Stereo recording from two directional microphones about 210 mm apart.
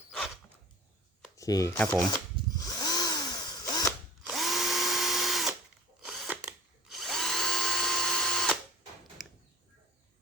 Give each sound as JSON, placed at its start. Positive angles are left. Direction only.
{"t": 1.4, "sound": "speech", "side_deg": 15}
{"t": 2.6, "sound": "drill", "side_deg": 15}
{"t": 3.8, "sound": "drill", "side_deg": 0}
{"t": 9.2, "sound": "a sound", "side_deg": 0}